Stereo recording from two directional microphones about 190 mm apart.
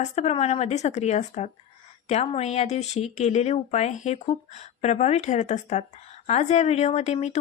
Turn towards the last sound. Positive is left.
turn(degrees=35)  # may be behind; listen again after turning